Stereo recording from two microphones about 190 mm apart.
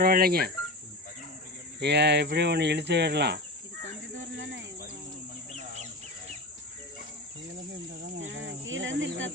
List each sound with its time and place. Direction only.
0.0 s cricket: 50° right (ahead or behind)
1.8 s speech: 60° right (ahead or behind)
4.2 s a sound: 80° right
8.2 s cricket: 75° right (ahead or behind)